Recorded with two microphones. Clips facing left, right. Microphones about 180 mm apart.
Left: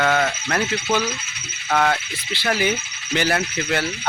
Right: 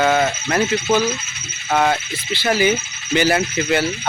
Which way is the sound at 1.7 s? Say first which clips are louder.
Right 2 dB; 5° right (ahead or behind).